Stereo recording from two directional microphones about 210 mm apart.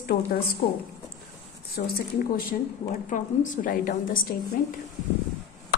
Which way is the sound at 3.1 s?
40° left (ahead or behind).